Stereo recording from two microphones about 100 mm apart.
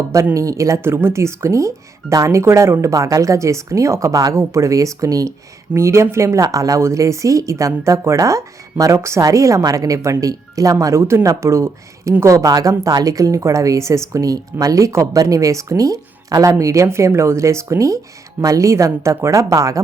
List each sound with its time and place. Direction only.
0.3 s a woman's voice: 35° right (ahead or behind)